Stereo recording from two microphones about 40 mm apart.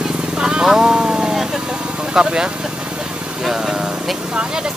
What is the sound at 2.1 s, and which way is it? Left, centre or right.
Speech, right.